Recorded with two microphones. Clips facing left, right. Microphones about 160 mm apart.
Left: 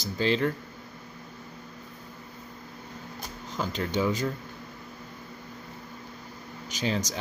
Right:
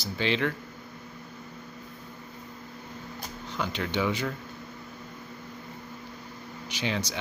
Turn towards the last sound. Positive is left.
turn(degrees=40)  # may be behind; listen again after turning